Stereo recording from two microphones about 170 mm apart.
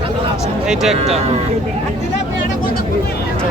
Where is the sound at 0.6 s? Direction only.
Centre (ahead or behind).